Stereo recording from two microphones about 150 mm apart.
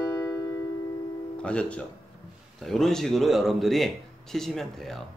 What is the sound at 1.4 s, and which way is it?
Speech, 5° left (ahead or behind).